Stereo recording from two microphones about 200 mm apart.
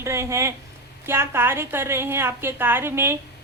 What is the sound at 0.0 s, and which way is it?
A woman's voice, 15° right (ahead or behind).